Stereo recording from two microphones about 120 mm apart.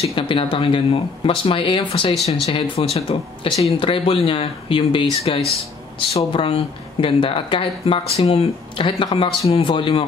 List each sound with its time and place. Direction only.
0.0 s speech: 45° left (ahead or behind)